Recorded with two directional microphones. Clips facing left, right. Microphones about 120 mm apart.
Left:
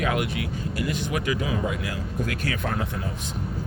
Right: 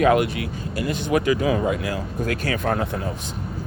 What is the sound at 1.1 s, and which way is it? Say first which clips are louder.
Speech: right 10 dB; 40° right (ahead or behind).